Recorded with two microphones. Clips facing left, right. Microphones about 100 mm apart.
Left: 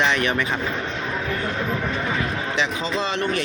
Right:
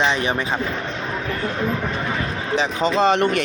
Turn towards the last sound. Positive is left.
turn(degrees=-60)  # may be behind; listen again after turning